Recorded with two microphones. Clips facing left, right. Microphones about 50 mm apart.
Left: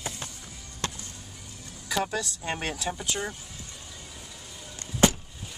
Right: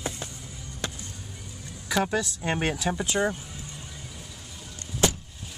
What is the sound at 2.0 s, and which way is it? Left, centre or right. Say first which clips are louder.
Speech: right 4 dB; centre.